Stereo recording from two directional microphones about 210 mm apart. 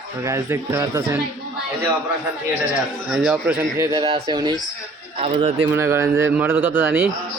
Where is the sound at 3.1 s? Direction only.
5° right (ahead or behind); by 5.6 s 25° right (ahead or behind).